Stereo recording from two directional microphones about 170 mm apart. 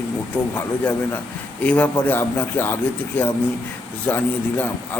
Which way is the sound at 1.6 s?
10° left (ahead or behind).